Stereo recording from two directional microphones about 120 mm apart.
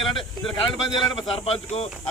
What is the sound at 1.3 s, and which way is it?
Speech, 55° left (ahead or behind).